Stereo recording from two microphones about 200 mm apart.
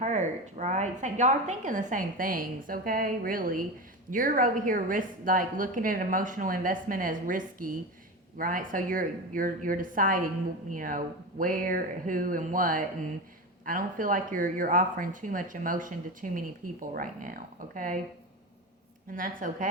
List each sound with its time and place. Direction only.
0.0 s a woman's voice: 35° right (ahead or behind)
19.1 s a woman's voice: 40° right (ahead or behind)